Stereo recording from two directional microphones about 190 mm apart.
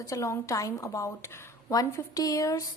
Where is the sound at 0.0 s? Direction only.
15° left (ahead or behind).